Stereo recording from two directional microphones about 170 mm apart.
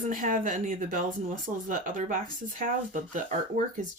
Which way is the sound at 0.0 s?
50° right (ahead or behind).